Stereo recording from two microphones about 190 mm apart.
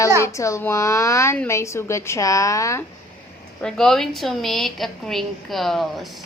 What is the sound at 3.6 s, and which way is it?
A woman's voice, 5° left (ahead or behind).